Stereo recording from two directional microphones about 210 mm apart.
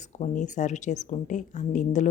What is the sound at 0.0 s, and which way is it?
Speech, 35° left (ahead or behind).